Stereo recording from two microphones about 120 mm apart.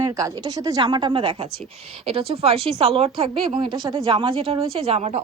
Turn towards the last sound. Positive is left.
turn(degrees=-60)  # may be behind; listen again after turning